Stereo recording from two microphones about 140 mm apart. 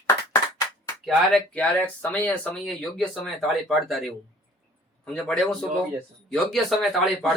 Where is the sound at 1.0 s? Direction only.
Centre (ahead or behind).